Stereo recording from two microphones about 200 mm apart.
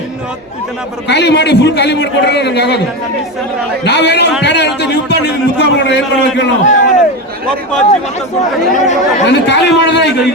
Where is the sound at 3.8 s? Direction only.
60° left (ahead or behind).